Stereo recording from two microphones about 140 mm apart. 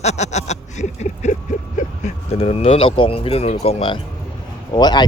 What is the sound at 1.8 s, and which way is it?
Vehicle, 60° left (ahead or behind).